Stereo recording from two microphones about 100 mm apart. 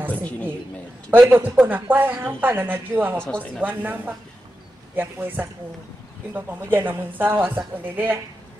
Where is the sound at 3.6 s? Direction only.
20° right (ahead or behind).